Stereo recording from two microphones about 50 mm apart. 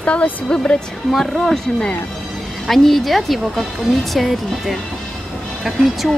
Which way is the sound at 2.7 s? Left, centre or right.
Centre.